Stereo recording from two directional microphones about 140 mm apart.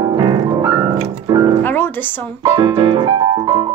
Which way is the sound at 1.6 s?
15° left (ahead or behind).